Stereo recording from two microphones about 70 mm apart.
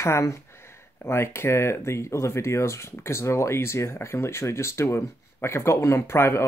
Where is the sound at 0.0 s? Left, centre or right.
Left.